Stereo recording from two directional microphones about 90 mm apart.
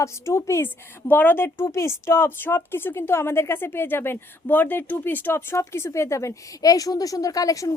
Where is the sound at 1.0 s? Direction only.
20° left (ahead or behind).